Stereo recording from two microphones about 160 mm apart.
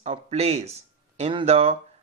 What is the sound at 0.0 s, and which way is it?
Speech, 40° right (ahead or behind).